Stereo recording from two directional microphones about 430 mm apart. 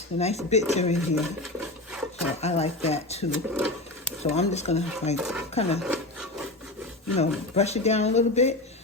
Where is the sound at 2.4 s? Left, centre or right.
Centre.